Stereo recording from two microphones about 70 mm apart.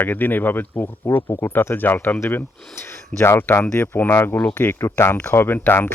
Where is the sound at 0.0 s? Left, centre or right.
Left.